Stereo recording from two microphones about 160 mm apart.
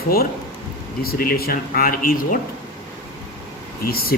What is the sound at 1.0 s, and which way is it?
Speech, 65° left (ahead or behind).